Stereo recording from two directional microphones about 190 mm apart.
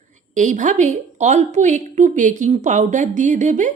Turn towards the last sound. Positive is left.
turn(degrees=-40)  # may be behind; listen again after turning